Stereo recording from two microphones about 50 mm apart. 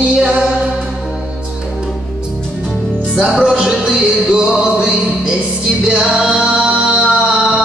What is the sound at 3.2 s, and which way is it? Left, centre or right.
Music, centre.